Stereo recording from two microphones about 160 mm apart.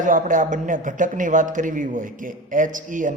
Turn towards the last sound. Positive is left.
turn(degrees=-55)  # may be behind; listen again after turning